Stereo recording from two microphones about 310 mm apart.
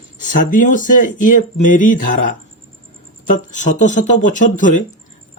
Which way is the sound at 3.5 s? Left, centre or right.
Left.